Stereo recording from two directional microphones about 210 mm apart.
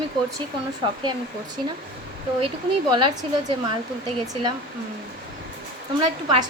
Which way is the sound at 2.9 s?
20° right (ahead or behind).